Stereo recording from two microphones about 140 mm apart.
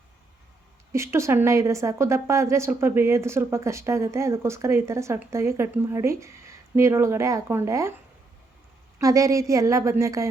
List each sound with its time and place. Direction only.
0.9 s a woman's voice: 20° right (ahead or behind)
9.0 s a woman's voice: 25° right (ahead or behind)